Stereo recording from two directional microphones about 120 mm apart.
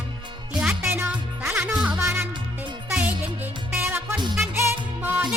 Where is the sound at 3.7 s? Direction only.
20° right (ahead or behind).